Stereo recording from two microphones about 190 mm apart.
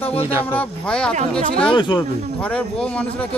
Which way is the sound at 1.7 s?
25° left (ahead or behind).